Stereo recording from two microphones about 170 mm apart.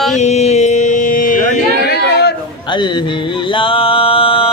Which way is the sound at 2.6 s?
25° left (ahead or behind).